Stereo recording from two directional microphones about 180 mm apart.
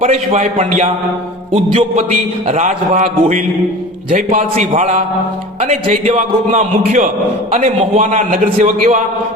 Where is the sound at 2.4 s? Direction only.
35° right (ahead or behind).